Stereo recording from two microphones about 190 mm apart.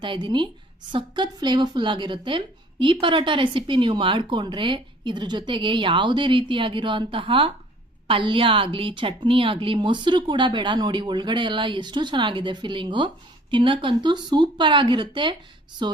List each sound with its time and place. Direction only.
0.0 s a woman's voice: 25° right (ahead or behind)